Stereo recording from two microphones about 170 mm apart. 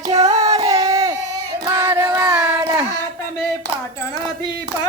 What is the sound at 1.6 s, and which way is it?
Child singing, 15° right (ahead or behind).